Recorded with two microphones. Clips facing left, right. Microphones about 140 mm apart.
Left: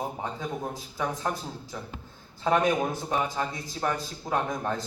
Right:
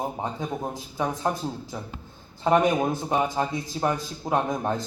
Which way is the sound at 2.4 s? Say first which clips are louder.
Right 3 dB; 15° right (ahead or behind).